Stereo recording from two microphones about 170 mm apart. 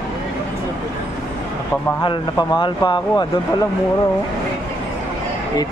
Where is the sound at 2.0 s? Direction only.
25° left (ahead or behind).